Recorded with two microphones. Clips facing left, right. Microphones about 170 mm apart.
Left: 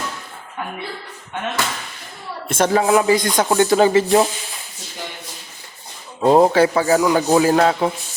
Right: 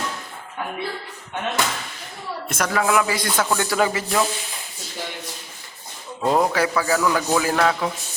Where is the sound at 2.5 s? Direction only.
30° left (ahead or behind).